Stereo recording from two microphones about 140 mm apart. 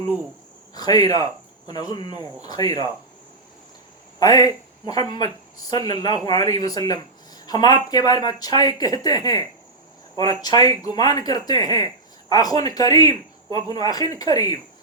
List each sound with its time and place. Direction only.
0.7 s speech: 30° left (ahead or behind)
4.2 s speech: 25° left (ahead or behind)